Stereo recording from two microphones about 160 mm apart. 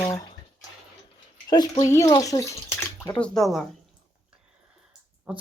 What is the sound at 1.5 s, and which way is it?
Speech, 25° left (ahead or behind).